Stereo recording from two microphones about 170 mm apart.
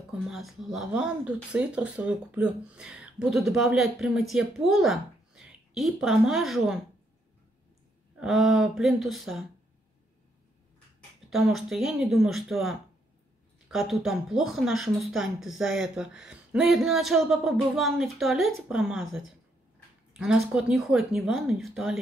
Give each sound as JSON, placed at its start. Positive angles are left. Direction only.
{"t": 0.3, "sound": "speech", "side_deg": 0}
{"t": 8.2, "sound": "speech", "side_deg": -5}
{"t": 11.2, "sound": "speech", "side_deg": 0}